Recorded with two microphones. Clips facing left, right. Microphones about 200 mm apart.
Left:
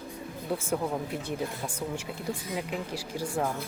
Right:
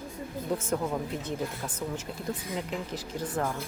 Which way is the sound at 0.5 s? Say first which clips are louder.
Even; 10° left (ahead or behind).